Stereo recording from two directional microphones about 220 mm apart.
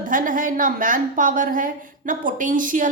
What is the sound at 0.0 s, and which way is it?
A woman's voice, 35° right (ahead or behind).